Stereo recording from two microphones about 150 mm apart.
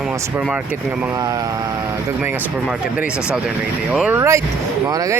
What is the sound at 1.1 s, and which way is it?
Speech, 25° right (ahead or behind).